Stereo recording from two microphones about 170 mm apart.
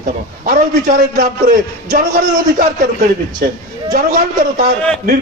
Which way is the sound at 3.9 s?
50° right (ahead or behind).